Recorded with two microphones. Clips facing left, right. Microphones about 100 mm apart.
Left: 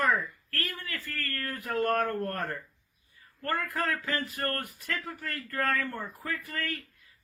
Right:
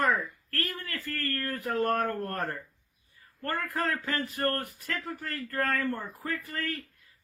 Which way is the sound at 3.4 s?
30° right (ahead or behind).